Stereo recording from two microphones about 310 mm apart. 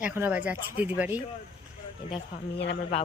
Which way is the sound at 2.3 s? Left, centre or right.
Left.